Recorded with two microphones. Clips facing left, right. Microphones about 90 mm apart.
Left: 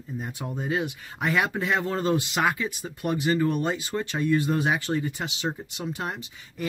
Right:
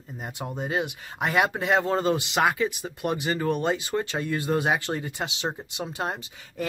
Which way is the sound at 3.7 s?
20° right (ahead or behind).